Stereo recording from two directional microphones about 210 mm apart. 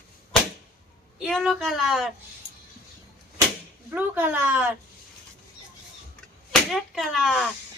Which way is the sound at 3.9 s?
10° right (ahead or behind).